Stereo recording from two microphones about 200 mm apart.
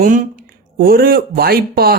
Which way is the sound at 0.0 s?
40° right (ahead or behind).